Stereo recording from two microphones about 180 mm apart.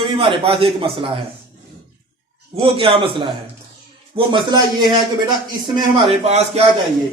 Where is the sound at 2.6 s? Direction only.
30° right (ahead or behind).